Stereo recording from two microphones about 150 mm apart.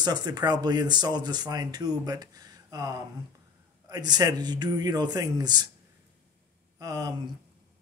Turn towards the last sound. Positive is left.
turn(degrees=-25)  # may be behind; listen again after turning